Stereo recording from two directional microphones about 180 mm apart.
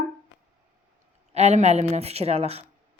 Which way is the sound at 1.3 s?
40° right (ahead or behind).